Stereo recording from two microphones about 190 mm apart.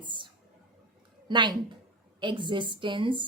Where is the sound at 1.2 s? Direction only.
25° right (ahead or behind).